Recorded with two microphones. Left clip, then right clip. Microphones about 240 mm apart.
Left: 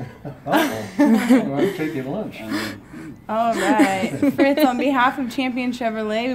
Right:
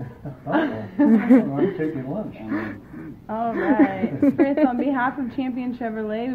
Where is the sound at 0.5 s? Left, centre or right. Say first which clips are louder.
Left 3 dB; left.